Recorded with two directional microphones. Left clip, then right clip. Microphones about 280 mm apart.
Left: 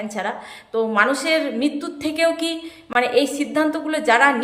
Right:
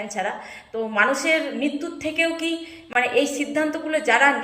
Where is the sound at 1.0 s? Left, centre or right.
Centre.